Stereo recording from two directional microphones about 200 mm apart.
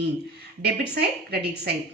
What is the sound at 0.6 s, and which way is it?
Speech, 50° right (ahead or behind).